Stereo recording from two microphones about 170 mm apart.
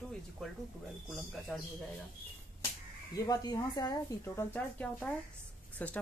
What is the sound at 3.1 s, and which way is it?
Speech, 20° left (ahead or behind).